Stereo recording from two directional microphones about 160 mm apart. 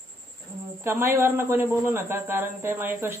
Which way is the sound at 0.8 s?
15° right (ahead or behind).